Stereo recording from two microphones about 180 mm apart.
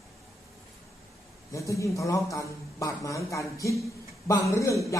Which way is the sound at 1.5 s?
15° left (ahead or behind).